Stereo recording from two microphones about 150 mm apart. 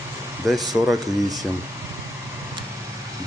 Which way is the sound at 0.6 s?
25° right (ahead or behind).